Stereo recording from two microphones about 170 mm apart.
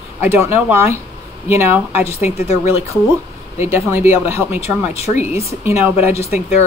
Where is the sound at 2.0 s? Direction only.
40° left (ahead or behind).